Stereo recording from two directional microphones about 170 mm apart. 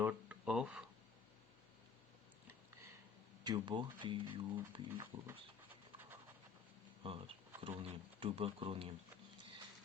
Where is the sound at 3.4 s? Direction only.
25° right (ahead or behind).